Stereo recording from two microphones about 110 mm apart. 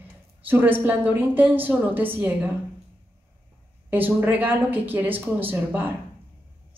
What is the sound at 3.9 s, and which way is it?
A woman's voice, 15° right (ahead or behind).